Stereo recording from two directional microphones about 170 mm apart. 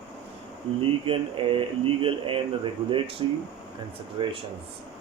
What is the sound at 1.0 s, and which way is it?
Speech, 30° right (ahead or behind).